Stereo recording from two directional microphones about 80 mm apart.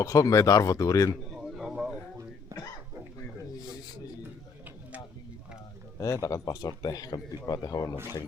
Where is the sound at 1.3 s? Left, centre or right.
Centre.